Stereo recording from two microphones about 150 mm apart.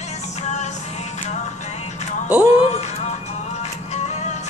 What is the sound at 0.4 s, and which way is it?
Music, 50° left (ahead or behind).